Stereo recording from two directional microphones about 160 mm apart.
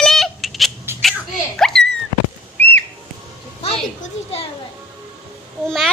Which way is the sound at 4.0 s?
40° left (ahead or behind).